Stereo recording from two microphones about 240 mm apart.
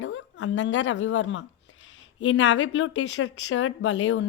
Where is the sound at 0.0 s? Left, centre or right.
Left.